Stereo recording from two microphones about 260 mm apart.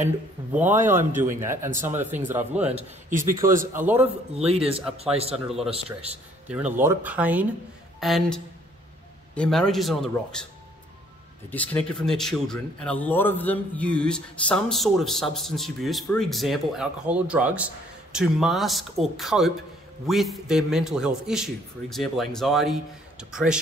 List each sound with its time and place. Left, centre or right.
0.5 s a man's voice: centre
3.1 s a man's voice: right
3.7 s a man's voice: centre
4.0 s speech: right
5.3 s speech: centre
5.7 s speech: right
6.4 s speech: centre
11.5 s speech: centre